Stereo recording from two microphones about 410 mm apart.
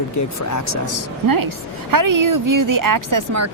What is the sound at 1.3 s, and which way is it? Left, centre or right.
A woman's voice, right.